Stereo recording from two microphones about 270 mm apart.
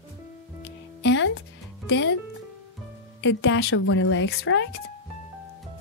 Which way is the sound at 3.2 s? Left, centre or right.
Left.